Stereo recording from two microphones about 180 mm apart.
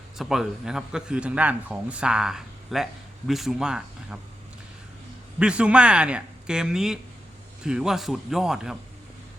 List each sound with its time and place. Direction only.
0.2 s a man's voice: centre (ahead or behind)
5.4 s a man's voice: 5° right (ahead or behind)